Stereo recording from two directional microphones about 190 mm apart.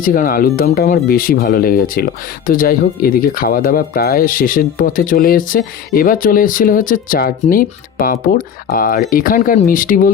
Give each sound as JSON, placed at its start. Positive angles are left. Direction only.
{"t": 0.0, "sound": "speech", "side_deg": 45}